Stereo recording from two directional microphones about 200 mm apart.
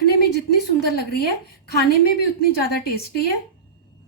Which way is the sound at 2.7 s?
50° left (ahead or behind).